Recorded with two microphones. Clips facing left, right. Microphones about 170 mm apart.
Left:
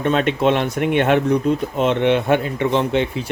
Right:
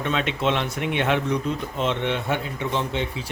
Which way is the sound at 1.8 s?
65° left (ahead or behind).